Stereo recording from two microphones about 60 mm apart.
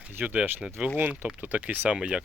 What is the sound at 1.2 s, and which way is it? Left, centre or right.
Speech, right.